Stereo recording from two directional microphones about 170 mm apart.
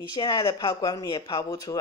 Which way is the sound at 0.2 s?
25° left (ahead or behind).